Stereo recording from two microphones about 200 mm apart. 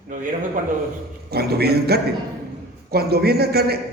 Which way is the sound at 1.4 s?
50° right (ahead or behind).